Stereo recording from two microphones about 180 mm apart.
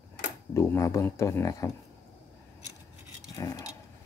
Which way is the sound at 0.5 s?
15° left (ahead or behind).